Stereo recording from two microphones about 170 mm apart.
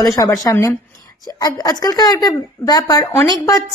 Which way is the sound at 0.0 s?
20° left (ahead or behind).